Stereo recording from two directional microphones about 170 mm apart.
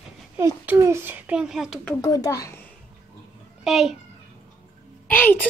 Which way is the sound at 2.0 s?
20° left (ahead or behind).